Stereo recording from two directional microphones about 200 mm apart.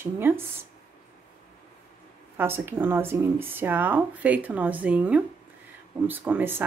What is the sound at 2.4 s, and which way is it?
A woman's voice, 10° right (ahead or behind).